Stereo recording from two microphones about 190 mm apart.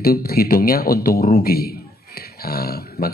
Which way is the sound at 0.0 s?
50° left (ahead or behind).